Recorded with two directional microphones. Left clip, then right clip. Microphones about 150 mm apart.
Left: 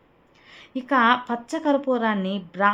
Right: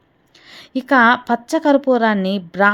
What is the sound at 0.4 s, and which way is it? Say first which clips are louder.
Speech: right 8 dB; 40° right (ahead or behind).